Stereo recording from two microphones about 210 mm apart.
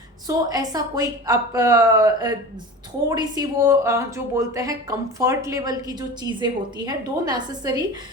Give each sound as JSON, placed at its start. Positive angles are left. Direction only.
{"t": 0.3, "sound": "speech", "side_deg": -15}